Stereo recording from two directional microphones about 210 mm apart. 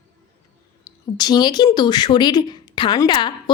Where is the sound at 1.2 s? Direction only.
20° left (ahead or behind).